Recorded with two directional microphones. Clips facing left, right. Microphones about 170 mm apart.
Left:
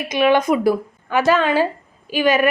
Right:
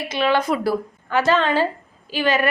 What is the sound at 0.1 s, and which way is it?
Speech, 15° left (ahead or behind).